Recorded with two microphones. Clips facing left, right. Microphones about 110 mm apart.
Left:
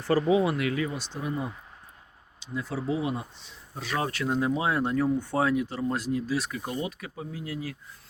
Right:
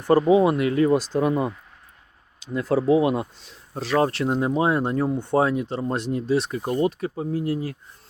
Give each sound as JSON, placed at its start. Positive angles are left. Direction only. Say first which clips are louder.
{"t": 0.0, "sound": "speech", "louder": "right 6 dB", "side_deg": -25}
{"t": 1.2, "sound": "speech", "louder": "right 10 dB", "side_deg": -70}
{"t": 2.5, "sound": "speech", "louder": "right 10 dB", "side_deg": -50}
{"t": 2.8, "sound": "speech", "louder": "right 10 dB", "side_deg": -80}
{"t": 3.4, "sound": "speech", "louder": "right 7 dB", "side_deg": -40}
{"t": 6.7, "sound": "speech", "louder": "right 10 dB", "side_deg": -45}